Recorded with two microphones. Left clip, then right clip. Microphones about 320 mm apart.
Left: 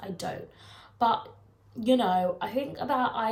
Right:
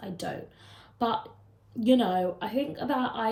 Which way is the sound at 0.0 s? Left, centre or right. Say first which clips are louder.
Left 1 dB; centre.